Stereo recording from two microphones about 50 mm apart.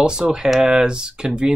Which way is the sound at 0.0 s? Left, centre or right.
Centre.